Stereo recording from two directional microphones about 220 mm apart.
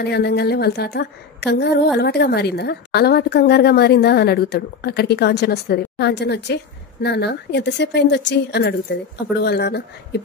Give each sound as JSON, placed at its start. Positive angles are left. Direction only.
{"t": 0.0, "sound": "a woman's voice", "side_deg": 50}